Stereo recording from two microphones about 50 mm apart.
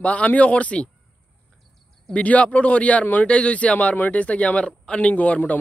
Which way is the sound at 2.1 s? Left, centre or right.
Left.